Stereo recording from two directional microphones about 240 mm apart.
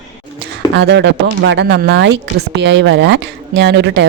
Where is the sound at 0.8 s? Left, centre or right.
Right.